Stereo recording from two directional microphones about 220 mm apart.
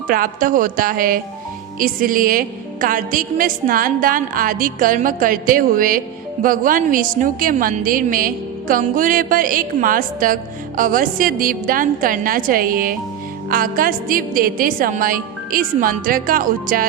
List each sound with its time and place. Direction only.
0.1 s a woman's voice: 40° right (ahead or behind)